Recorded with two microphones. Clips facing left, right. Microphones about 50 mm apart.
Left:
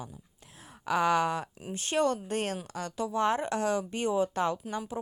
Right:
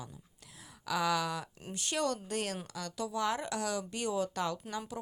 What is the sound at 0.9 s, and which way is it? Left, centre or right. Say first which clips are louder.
Speech: left 6 dB; left.